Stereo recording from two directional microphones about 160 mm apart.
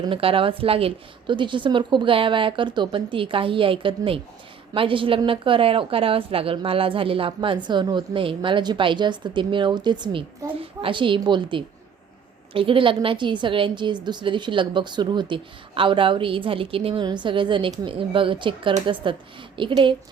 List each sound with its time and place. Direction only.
0.0 s a woman's voice: 35° right (ahead or behind)
12.5 s a woman's voice: 35° right (ahead or behind)